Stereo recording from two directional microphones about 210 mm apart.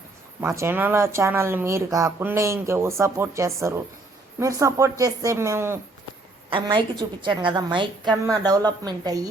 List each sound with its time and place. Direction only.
0.4 s speech: 15° right (ahead or behind)
6.5 s a woman's voice: 25° right (ahead or behind)